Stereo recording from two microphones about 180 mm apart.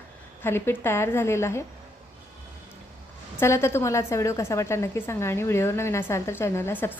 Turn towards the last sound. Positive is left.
turn(degrees=10)  # may be behind; listen again after turning